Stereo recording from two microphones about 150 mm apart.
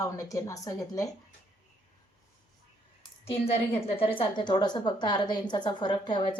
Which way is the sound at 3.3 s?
40° left (ahead or behind).